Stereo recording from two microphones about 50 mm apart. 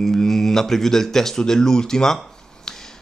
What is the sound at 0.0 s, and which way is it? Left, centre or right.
Speech, centre.